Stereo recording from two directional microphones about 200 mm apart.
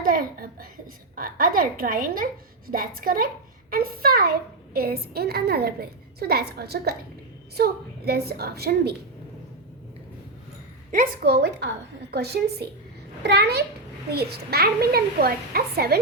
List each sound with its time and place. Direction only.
0.0 s a sound: 45° right (ahead or behind)
1.1 s a child's voice: 45° right (ahead or behind)
10.9 s a woman's voice: 50° right (ahead or behind)